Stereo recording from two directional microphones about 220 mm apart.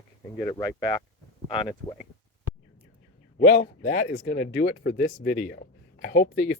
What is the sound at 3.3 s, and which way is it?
Speech, 40° left (ahead or behind).